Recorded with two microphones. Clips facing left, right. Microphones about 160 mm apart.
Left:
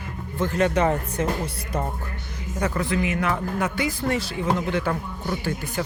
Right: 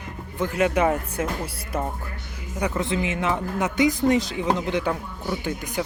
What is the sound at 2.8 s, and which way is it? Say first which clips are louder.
Speech: left 1 dB; 25° right (ahead or behind).